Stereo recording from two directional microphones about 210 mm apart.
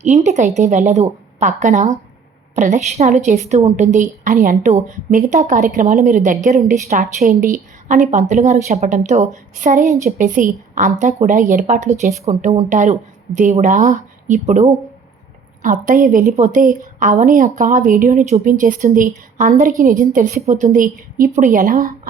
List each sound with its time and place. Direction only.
0.0 s speech: 35° right (ahead or behind)